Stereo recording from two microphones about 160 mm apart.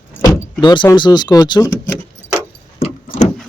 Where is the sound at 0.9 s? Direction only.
25° left (ahead or behind).